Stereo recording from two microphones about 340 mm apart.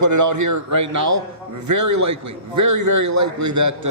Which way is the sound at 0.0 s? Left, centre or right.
Right.